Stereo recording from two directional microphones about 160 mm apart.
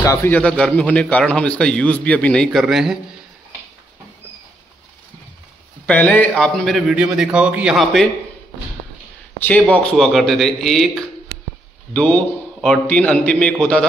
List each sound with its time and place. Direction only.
0.0 s a man's voice: 20° left (ahead or behind)
0.4 s a man's voice: 5° left (ahead or behind)
5.9 s a man's voice: 10° left (ahead or behind)
9.5 s a man's voice: 5° left (ahead or behind)